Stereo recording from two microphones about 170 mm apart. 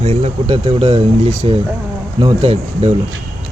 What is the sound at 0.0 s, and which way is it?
Speech, 35° right (ahead or behind).